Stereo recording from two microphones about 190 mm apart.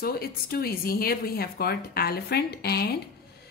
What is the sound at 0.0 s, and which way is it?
Speech, 55° left (ahead or behind).